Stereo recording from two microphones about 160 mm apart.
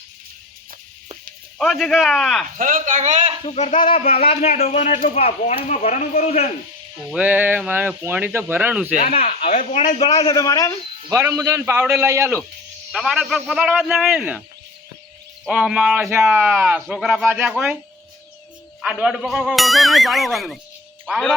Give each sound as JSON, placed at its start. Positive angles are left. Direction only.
{"t": 1.5, "sound": "speech", "side_deg": 0}
{"t": 2.6, "sound": "a man's voice", "side_deg": -55}
{"t": 3.4, "sound": "speech", "side_deg": 45}
{"t": 7.1, "sound": "speech", "side_deg": -10}
{"t": 9.1, "sound": "speech", "side_deg": 35}
{"t": 9.5, "sound": "speech", "side_deg": 55}
{"t": 10.0, "sound": "a man's voice", "side_deg": 25}
{"t": 11.1, "sound": "speech", "side_deg": -15}
{"t": 11.9, "sound": "a man's voice", "side_deg": -20}
{"t": 12.9, "sound": "a man's voice", "side_deg": 0}
{"t": 15.4, "sound": "speech", "side_deg": -5}
{"t": 18.8, "sound": "speech", "side_deg": -5}